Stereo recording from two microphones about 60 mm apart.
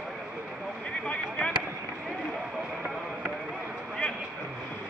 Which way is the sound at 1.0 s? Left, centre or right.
Centre.